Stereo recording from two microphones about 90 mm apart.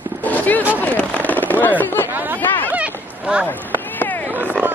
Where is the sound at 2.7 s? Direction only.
15° right (ahead or behind).